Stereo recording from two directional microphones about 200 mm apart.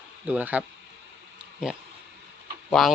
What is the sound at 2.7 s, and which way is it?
Speech, centre (ahead or behind).